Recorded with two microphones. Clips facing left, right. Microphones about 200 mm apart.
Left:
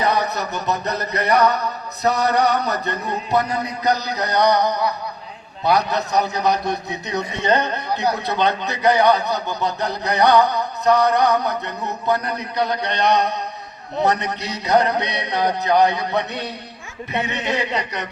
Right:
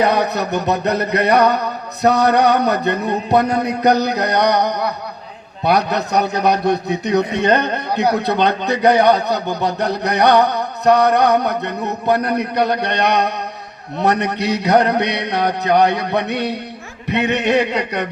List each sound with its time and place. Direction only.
0.0 s a man's voice: 65° right (ahead or behind)